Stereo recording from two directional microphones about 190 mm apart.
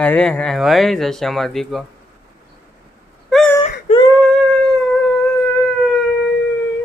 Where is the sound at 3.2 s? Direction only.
Centre (ahead or behind).